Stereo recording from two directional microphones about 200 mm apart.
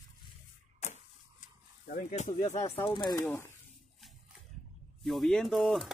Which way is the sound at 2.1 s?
35° left (ahead or behind).